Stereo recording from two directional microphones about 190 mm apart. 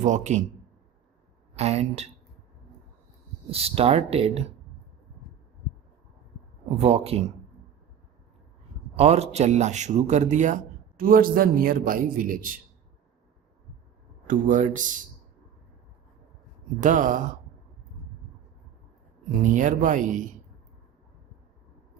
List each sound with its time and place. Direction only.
0.0 s a man's voice: 40° right (ahead or behind)
1.5 s a man's voice: 35° right (ahead or behind)
3.5 s a man's voice: 30° right (ahead or behind)
6.7 s a man's voice: 30° right (ahead or behind)
9.0 s a man's voice: 35° right (ahead or behind)
14.3 s speech: 40° right (ahead or behind)
16.8 s speech: 45° right (ahead or behind)
19.4 s speech: 40° right (ahead or behind)